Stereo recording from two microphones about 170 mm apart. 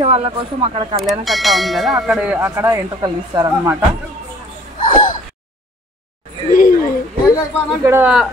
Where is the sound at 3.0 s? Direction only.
25° right (ahead or behind).